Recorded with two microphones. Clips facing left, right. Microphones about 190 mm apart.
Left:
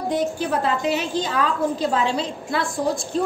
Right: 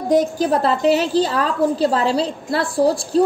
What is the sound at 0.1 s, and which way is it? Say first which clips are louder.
A woman's voice: right 8 dB; 40° right (ahead or behind).